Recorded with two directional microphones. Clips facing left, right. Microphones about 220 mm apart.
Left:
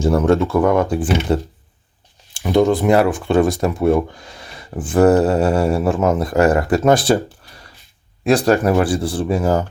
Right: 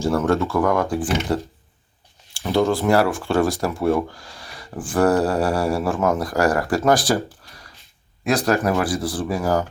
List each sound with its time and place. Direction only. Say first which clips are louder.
0.0 s speech: left 4 dB; 15° left (ahead or behind)